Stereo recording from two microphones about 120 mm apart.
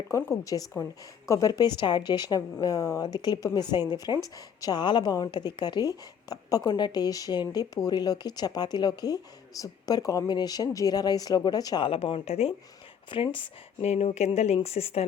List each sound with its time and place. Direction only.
0.1 s speech: 20° left (ahead or behind)
11.9 s speech: 50° left (ahead or behind)
13.1 s speech: 45° left (ahead or behind)
13.8 s speech: 65° left (ahead or behind)